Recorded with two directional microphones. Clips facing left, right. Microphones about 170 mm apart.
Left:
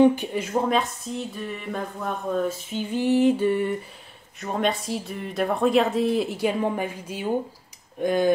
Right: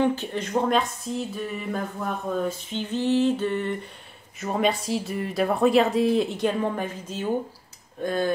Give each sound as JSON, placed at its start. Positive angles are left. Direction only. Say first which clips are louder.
{"t": 0.0, "sound": "speech", "louder": "left 5 dB", "side_deg": 15}
{"t": 4.4, "sound": "speech", "louder": "right 1 dB", "side_deg": 0}